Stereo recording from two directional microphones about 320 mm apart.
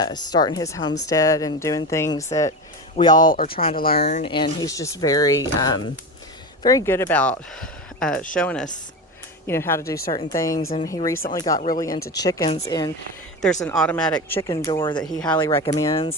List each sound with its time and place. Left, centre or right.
0.0 s speech: centre
3.2 s speech: left
4.2 s speech: centre
15.0 s speech: centre